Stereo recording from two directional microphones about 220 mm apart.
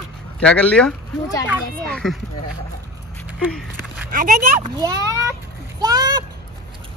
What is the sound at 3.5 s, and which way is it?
Speech, 5° right (ahead or behind).